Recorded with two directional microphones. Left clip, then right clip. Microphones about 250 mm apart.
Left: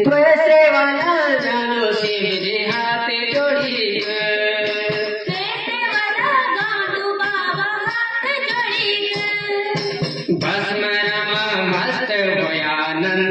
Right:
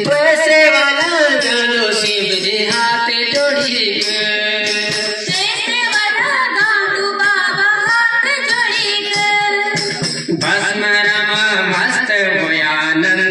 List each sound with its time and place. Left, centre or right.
0.5 s music: right